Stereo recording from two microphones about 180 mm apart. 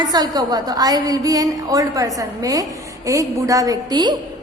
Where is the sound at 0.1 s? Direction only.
20° right (ahead or behind).